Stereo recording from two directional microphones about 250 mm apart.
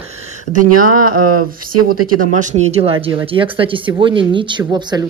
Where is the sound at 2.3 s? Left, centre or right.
Right.